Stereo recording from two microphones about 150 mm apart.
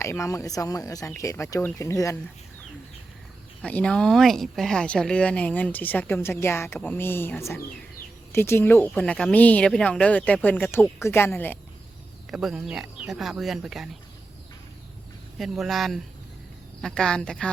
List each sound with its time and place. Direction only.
0.0 s speech: 20° left (ahead or behind)
3.6 s speech: 5° left (ahead or behind)
12.3 s speech: centre (ahead or behind)
15.4 s speech: centre (ahead or behind)